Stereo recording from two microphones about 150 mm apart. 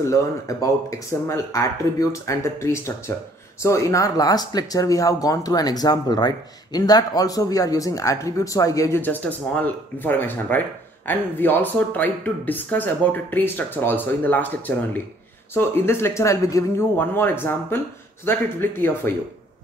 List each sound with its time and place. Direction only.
0.0 s speech: 20° left (ahead or behind)